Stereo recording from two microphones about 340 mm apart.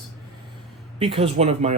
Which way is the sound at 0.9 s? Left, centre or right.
Centre.